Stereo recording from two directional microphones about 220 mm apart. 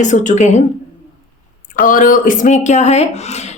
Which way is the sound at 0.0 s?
35° left (ahead or behind).